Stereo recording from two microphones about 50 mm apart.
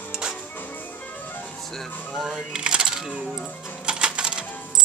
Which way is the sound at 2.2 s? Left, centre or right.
Centre.